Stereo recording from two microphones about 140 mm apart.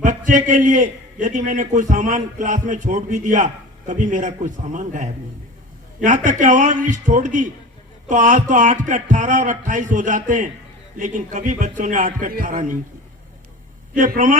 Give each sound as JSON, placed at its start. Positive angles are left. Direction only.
{"t": 0.0, "sound": "a man's voice", "side_deg": -65}
{"t": 13.9, "sound": "a man's voice", "side_deg": -70}